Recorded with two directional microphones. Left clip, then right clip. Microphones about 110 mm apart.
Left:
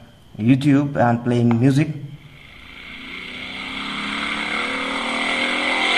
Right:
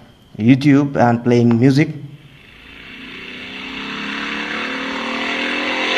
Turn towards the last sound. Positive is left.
turn(degrees=0)  # may be behind; listen again after turning